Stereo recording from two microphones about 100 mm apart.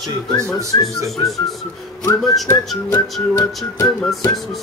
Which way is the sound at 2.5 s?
25° left (ahead or behind).